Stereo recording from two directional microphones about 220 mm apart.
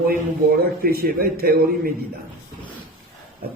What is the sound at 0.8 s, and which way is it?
A man's voice, 40° right (ahead or behind).